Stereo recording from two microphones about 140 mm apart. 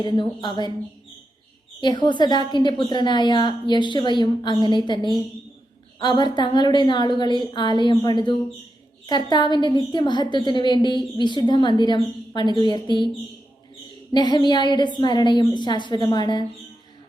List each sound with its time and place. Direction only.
0.0 s a woman's voice: 35° left (ahead or behind)
1.8 s a woman's voice: 30° left (ahead or behind)
14.1 s a woman's voice: 30° left (ahead or behind)